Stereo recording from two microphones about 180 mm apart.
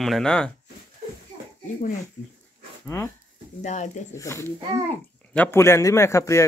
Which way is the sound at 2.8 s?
15° left (ahead or behind).